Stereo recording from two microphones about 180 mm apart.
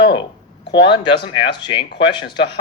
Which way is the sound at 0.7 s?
25° left (ahead or behind).